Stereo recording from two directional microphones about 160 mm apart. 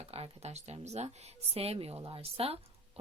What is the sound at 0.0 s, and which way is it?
A woman's voice, 40° right (ahead or behind).